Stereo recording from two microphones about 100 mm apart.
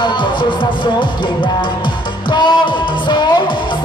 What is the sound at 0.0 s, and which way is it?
Music, 55° left (ahead or behind).